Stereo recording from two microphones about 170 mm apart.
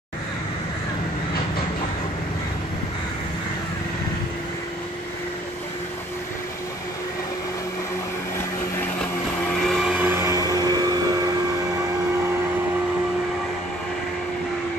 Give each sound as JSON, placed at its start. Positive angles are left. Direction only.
{"t": 9.6, "sound": "vehicle", "side_deg": 0}